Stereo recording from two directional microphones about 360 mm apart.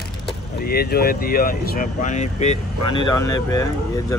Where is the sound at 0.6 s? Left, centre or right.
Left.